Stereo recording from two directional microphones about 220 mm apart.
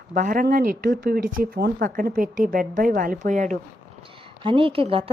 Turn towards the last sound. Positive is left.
turn(degrees=-25)  # may be behind; listen again after turning